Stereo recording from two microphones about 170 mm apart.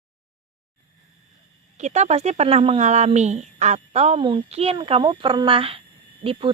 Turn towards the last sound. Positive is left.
turn(degrees=-35)  # may be behind; listen again after turning